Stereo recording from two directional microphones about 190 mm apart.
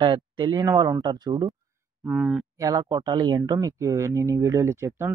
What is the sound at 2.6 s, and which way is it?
Speech, 20° right (ahead or behind).